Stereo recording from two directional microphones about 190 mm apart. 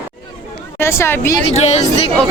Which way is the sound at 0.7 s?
15° left (ahead or behind).